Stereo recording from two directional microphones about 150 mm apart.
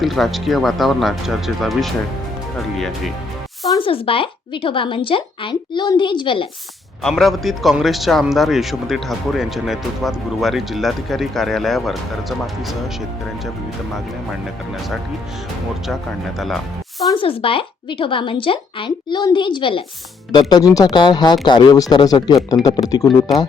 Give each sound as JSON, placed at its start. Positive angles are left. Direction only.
{"t": 0.0, "sound": "speech", "side_deg": 0}
{"t": 3.7, "sound": "a woman's voice", "side_deg": 35}
{"t": 7.0, "sound": "speech", "side_deg": 0}
{"t": 17.2, "sound": "a woman's voice", "side_deg": 40}